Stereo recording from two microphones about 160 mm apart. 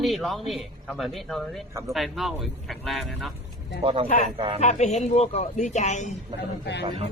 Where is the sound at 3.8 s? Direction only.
35° right (ahead or behind).